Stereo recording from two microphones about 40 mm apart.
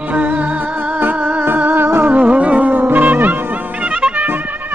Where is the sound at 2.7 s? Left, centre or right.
Right.